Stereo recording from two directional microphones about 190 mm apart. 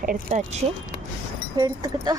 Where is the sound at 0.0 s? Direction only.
45° right (ahead or behind).